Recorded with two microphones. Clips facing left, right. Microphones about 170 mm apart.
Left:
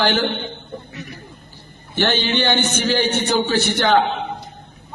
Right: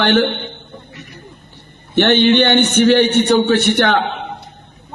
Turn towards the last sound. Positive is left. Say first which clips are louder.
# right 4 dB
turn(degrees=-65)  # may be behind; listen again after turning